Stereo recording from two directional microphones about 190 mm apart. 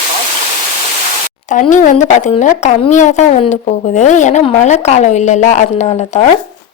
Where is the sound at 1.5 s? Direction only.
40° left (ahead or behind).